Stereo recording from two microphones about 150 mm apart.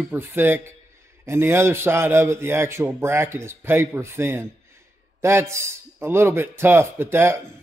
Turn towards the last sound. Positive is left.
turn(degrees=-15)  # may be behind; listen again after turning